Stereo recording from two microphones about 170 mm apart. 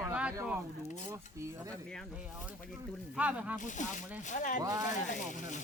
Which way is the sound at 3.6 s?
45° left (ahead or behind).